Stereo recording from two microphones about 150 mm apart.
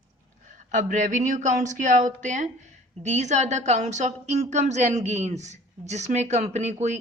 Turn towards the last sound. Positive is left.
turn(degrees=-50)  # may be behind; listen again after turning